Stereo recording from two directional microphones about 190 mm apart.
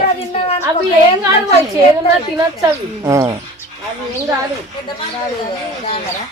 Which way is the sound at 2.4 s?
15° right (ahead or behind).